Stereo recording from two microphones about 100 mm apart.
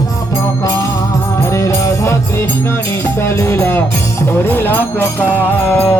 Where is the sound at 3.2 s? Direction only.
25° left (ahead or behind).